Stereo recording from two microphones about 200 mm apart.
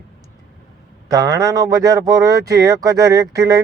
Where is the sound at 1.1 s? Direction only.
15° right (ahead or behind).